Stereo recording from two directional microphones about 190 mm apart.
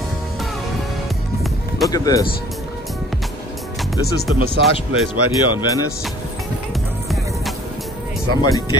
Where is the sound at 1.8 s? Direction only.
20° left (ahead or behind).